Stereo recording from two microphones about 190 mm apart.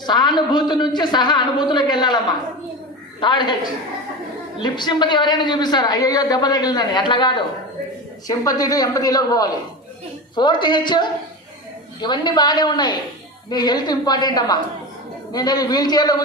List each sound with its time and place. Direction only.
0.0 s a man's voice: 20° left (ahead or behind)